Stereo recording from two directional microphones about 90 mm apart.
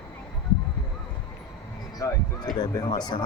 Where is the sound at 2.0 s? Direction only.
35° left (ahead or behind).